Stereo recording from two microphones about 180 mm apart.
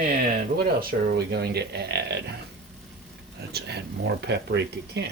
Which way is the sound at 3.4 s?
65° right (ahead or behind).